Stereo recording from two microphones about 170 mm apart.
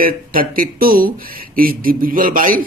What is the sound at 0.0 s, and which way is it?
Speech, 55° right (ahead or behind).